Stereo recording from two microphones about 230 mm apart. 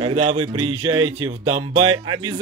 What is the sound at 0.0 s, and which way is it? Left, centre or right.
Speech, right.